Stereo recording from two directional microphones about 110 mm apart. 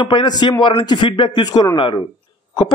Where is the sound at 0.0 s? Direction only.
50° left (ahead or behind).